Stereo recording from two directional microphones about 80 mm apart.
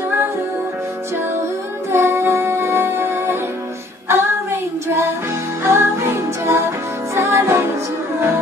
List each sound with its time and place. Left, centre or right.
1.9 s music: right
4.1 s child singing: right
5.6 s music: right